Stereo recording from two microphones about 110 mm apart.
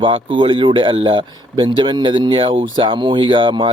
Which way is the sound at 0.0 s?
50° right (ahead or behind).